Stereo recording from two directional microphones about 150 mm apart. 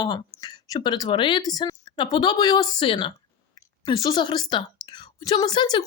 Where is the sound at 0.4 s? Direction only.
30° left (ahead or behind).